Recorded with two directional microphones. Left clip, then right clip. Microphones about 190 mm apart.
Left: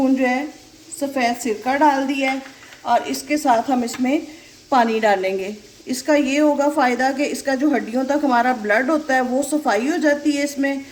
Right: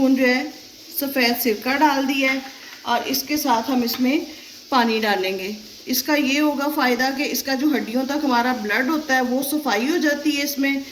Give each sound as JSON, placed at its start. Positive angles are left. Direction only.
{"t": 0.0, "sound": "a woman's voice", "side_deg": 25}